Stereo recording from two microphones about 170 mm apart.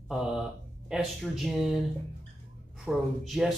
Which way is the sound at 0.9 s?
Centre (ahead or behind).